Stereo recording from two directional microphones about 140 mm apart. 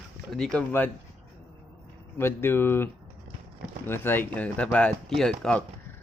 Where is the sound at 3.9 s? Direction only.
15° left (ahead or behind).